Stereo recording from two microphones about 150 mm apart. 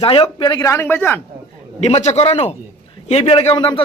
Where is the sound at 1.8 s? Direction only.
50° left (ahead or behind).